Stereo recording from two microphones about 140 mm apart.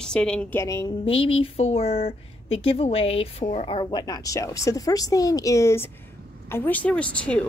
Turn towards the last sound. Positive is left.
turn(degrees=10)  # may be behind; listen again after turning